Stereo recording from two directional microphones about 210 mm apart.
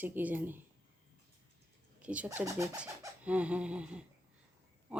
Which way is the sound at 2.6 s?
5° right (ahead or behind).